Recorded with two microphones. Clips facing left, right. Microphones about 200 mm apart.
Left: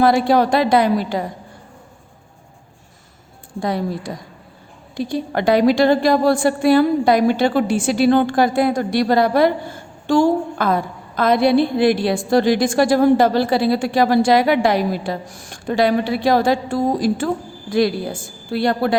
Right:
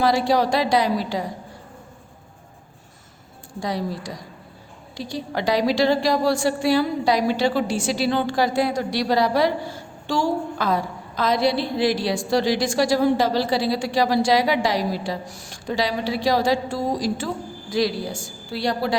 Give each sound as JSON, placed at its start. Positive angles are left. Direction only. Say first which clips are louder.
{"t": 0.0, "sound": "a woman's voice", "louder": "left 5 dB", "side_deg": 55}
{"t": 3.6, "sound": "a woman's voice", "louder": "left 4 dB", "side_deg": 55}